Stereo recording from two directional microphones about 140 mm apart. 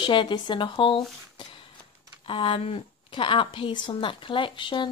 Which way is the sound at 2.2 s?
40° left (ahead or behind).